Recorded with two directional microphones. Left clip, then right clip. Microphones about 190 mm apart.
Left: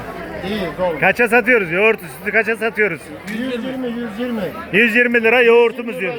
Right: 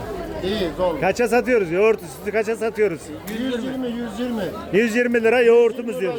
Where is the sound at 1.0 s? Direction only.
5° right (ahead or behind).